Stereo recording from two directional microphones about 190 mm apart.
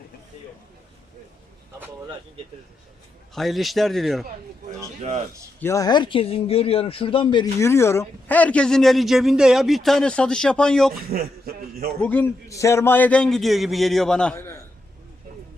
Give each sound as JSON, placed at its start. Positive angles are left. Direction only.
{"t": 3.3, "sound": "speech", "side_deg": 0}
{"t": 5.5, "sound": "speech", "side_deg": 15}
{"t": 7.6, "sound": "speech", "side_deg": 15}
{"t": 11.1, "sound": "a sound", "side_deg": -50}
{"t": 12.0, "sound": "a man's voice", "side_deg": 10}